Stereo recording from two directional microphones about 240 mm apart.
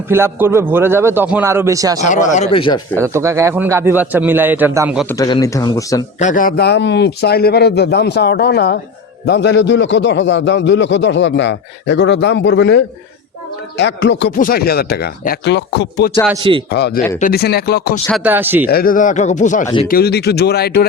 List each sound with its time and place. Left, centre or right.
0.1 s speech: centre
2.0 s speech: left
3.0 s speech: centre
5.0 s speech: centre
6.1 s a man's voice: left
16.4 s a man's voice: right
16.7 s a man's voice: left
18.1 s speech: centre
18.7 s speech: left
19.6 s speech: centre
19.9 s speech: left